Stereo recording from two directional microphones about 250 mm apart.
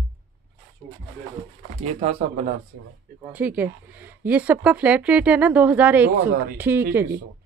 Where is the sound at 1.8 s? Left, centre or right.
Right.